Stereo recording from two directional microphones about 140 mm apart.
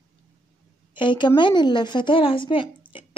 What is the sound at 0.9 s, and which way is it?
A woman's voice, 35° left (ahead or behind).